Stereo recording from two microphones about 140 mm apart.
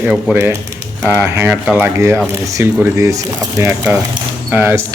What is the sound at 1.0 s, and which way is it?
Speech, 15° right (ahead or behind).